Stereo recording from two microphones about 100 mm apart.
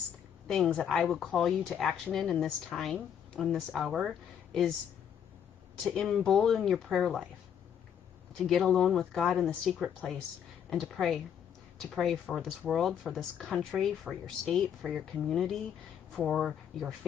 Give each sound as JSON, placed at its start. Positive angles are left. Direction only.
{"t": 0.5, "sound": "speech", "side_deg": 5}
{"t": 5.9, "sound": "speech", "side_deg": 0}
{"t": 8.4, "sound": "speech", "side_deg": 0}